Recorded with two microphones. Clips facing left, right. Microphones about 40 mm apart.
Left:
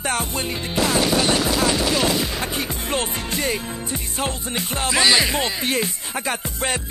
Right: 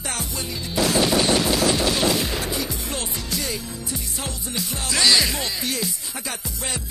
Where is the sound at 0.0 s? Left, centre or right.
Left.